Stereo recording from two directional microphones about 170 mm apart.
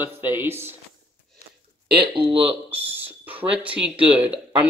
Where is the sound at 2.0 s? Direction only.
30° right (ahead or behind).